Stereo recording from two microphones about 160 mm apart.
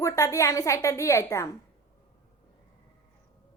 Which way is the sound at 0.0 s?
20° left (ahead or behind).